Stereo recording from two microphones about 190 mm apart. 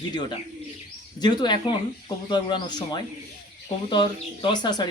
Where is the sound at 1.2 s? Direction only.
25° left (ahead or behind).